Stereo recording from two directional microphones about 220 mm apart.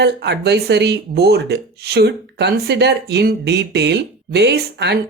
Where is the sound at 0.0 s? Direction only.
50° right (ahead or behind).